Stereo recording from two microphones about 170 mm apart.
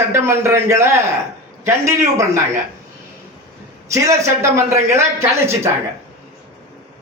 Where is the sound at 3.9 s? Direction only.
15° right (ahead or behind).